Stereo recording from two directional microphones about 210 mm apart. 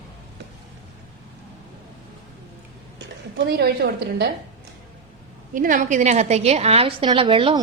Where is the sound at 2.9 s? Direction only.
50° right (ahead or behind).